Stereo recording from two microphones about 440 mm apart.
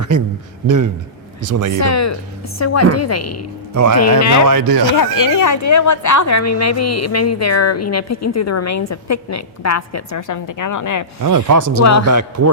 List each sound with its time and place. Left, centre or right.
1.5 s speech: right
1.8 s a woman's voice: left
3.8 s speech: right
4.2 s a woman's voice: left
4.4 s speech: right
4.9 s a woman's voice: left
11.2 s speech: right
11.8 s a woman's voice: left
12.0 s a man's voice: right